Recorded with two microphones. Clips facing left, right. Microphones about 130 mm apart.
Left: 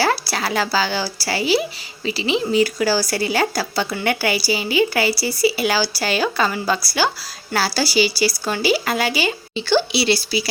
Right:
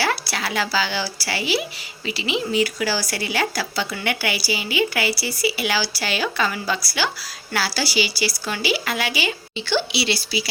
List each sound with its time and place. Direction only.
0.0 s speech: 35° left (ahead or behind)